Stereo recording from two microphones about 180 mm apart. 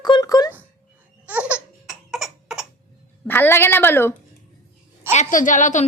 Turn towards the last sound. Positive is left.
turn(degrees=45)  # may be behind; listen again after turning